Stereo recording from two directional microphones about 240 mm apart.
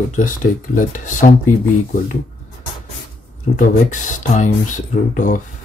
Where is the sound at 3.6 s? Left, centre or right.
Left.